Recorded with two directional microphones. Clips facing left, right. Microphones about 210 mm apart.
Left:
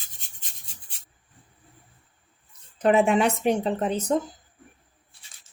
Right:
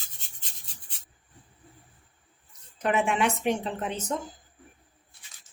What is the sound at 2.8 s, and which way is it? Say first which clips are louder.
A woman's voice: left 6 dB; 35° left (ahead or behind).